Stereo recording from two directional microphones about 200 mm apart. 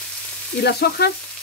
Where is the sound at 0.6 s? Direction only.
55° left (ahead or behind).